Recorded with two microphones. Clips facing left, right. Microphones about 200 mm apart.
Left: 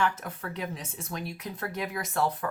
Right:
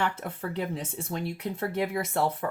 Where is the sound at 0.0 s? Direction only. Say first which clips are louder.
Even; 30° right (ahead or behind).